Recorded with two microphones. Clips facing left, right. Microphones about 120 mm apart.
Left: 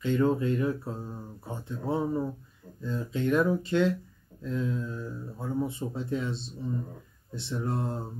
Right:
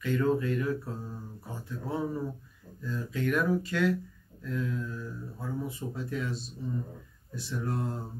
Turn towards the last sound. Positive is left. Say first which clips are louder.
# left 2 dB
turn(degrees=25)  # may be behind; listen again after turning